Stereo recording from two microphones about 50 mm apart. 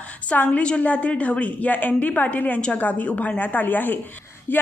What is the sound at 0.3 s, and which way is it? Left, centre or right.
A woman's voice, left.